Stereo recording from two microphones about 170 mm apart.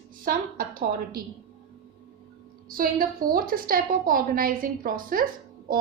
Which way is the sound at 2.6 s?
55° right (ahead or behind).